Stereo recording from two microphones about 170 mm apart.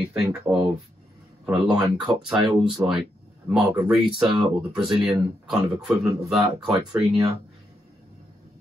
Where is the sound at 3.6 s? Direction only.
30° right (ahead or behind).